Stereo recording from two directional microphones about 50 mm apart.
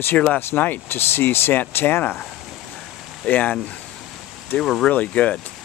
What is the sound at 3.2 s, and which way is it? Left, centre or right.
Speech, left.